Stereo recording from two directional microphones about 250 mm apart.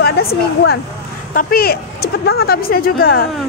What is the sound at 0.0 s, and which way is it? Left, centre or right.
Speech, left.